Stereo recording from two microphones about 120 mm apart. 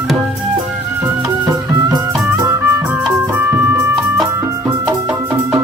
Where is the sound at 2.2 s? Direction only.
25° right (ahead or behind).